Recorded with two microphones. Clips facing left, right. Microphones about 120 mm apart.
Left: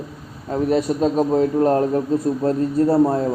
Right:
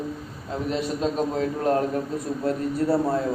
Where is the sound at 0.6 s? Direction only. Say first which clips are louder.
Left 7 dB; 45° left (ahead or behind).